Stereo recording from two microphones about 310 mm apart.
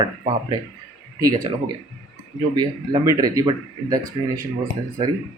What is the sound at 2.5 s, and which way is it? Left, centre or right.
Speech, centre.